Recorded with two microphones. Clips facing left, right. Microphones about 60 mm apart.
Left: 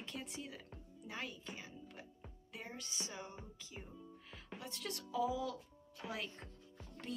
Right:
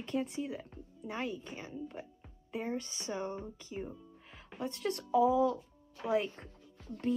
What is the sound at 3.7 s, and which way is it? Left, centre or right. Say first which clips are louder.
Music: right 10 dB; centre.